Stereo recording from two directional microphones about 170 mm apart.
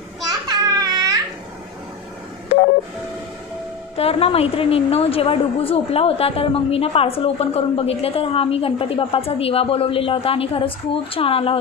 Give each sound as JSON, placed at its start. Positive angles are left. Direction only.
{"t": 0.5, "sound": "baby cry", "side_deg": -25}
{"t": 3.9, "sound": "a woman's voice", "side_deg": 35}